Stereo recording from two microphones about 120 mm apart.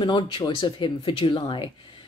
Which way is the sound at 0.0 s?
40° left (ahead or behind).